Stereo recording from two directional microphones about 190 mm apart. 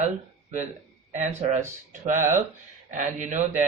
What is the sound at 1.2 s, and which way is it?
Speech, 40° right (ahead or behind).